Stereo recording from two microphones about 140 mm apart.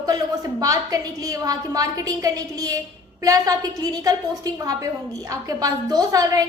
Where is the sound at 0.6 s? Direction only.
25° right (ahead or behind).